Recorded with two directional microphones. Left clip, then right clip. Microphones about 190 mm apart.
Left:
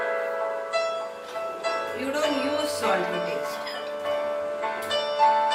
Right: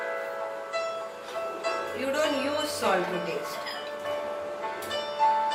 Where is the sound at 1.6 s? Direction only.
15° left (ahead or behind).